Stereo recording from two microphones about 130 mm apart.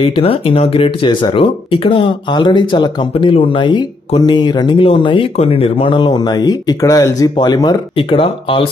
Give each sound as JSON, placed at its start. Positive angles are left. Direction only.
{"t": 0.0, "sound": "speech", "side_deg": 45}
{"t": 6.8, "sound": "speech", "side_deg": 25}
{"t": 8.1, "sound": "speech", "side_deg": 45}